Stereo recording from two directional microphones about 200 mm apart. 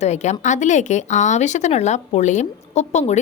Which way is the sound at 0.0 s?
35° left (ahead or behind).